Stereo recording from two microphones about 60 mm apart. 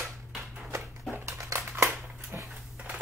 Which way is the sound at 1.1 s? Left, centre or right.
Right.